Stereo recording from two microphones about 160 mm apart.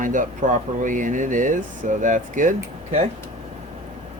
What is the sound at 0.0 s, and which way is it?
Speech, 55° right (ahead or behind).